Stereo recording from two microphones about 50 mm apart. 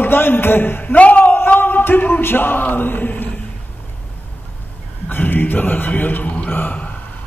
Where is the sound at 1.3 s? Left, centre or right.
Left.